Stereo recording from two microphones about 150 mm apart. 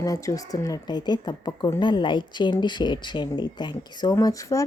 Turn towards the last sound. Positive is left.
turn(degrees=20)  # may be behind; listen again after turning